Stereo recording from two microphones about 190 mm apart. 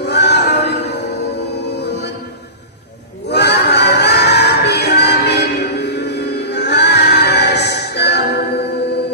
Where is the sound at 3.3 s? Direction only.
60° left (ahead or behind).